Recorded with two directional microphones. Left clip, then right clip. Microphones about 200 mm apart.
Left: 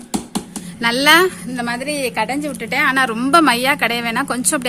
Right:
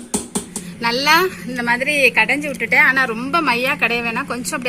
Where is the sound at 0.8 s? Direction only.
45° left (ahead or behind).